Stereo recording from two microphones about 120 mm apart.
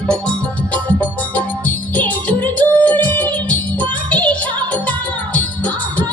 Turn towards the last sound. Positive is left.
turn(degrees=10)  # may be behind; listen again after turning